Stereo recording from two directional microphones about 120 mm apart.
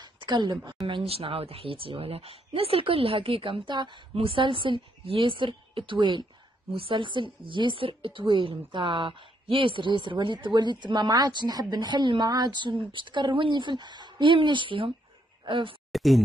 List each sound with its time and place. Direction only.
0.0 s a sound: 40° right (ahead or behind)
0.8 s a woman's voice: 50° right (ahead or behind)
15.9 s speech: centre (ahead or behind)